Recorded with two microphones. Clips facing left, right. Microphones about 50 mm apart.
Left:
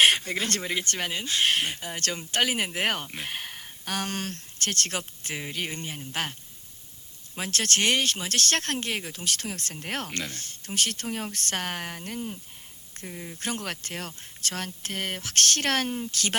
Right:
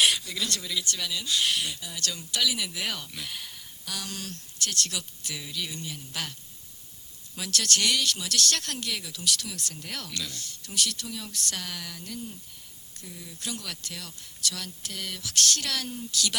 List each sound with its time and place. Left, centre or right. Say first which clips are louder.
0.0 s speech: left 4 dB; left
7.3 s speech: left 2 dB; left